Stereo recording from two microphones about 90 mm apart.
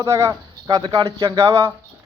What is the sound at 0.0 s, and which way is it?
Speech, 35° right (ahead or behind).